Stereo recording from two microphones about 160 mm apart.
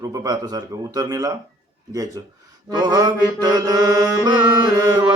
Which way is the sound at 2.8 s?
25° right (ahead or behind).